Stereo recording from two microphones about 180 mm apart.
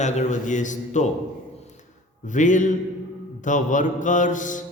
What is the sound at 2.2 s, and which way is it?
A man's voice, 45° left (ahead or behind).